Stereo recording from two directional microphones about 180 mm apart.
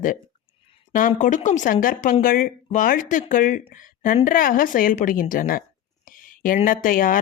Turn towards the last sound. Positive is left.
turn(degrees=50)  # may be behind; listen again after turning